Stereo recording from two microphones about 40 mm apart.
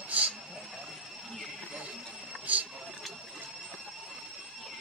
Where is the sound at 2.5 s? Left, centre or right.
Right.